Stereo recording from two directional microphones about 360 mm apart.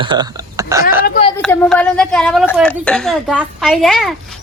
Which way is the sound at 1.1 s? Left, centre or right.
Centre.